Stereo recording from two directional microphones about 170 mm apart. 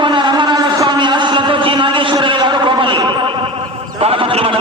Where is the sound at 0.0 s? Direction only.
30° right (ahead or behind).